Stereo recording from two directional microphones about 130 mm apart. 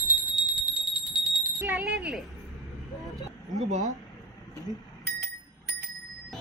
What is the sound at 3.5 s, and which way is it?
Speech, 65° right (ahead or behind).